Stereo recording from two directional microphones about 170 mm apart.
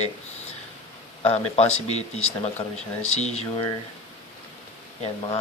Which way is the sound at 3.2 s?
40° left (ahead or behind).